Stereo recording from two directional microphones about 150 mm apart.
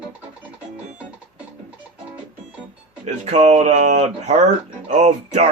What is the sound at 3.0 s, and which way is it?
Speech, 50° right (ahead or behind).